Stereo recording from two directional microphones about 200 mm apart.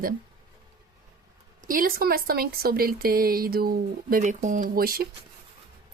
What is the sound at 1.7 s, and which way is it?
A woman's voice, 45° right (ahead or behind).